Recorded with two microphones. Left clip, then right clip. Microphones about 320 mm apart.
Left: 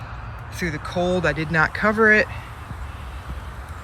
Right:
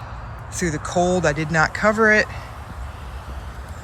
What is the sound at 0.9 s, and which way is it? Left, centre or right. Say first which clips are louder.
Speech: right 3 dB; right.